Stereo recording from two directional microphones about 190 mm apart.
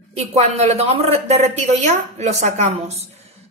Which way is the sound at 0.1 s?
35° right (ahead or behind).